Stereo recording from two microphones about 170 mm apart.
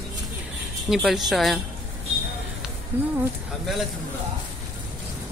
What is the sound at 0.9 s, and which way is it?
Speech, centre (ahead or behind).